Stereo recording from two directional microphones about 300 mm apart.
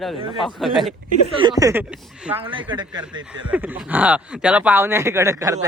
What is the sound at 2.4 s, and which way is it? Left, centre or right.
A woman's voice, centre.